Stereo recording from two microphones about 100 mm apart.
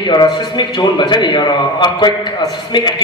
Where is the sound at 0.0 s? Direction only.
50° left (ahead or behind).